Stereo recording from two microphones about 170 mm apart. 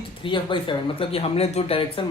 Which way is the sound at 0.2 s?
30° left (ahead or behind).